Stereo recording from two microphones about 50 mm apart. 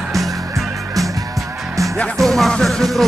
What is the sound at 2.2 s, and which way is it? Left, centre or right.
Music, centre.